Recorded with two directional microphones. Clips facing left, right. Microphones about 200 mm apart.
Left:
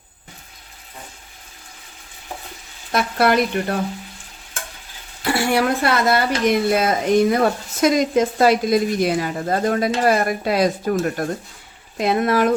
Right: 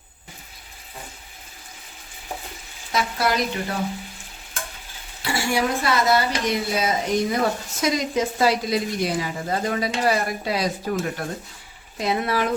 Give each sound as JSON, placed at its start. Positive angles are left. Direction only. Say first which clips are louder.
{"t": 2.9, "sound": "speech", "louder": "left 6 dB", "side_deg": 60}
{"t": 5.2, "sound": "speech", "louder": "left 5 dB", "side_deg": 60}